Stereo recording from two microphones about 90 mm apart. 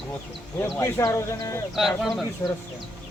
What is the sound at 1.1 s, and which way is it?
Speech, 30° left (ahead or behind).